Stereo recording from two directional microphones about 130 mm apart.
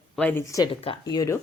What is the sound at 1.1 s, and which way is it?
Speech, 25° left (ahead or behind).